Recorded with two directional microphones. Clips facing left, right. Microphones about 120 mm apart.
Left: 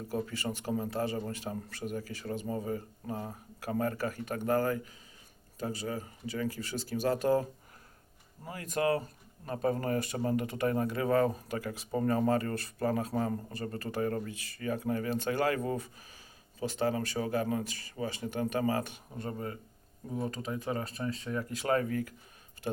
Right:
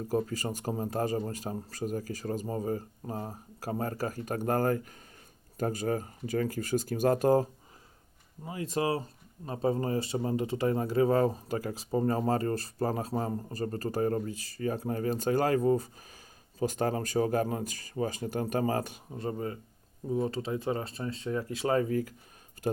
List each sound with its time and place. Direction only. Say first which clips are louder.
0.1 s speech: right 4 dB; 40° right (ahead or behind)
8.6 s speech: even; 30° right (ahead or behind)
22.6 s speech: right 4 dB; 40° right (ahead or behind)